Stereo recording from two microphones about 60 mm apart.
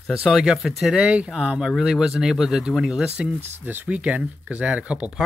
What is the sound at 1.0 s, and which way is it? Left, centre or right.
Speech, centre.